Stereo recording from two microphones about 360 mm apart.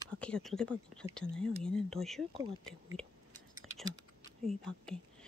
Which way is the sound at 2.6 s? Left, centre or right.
Centre.